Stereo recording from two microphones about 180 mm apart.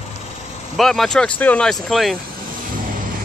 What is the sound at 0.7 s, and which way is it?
Speech, centre (ahead or behind).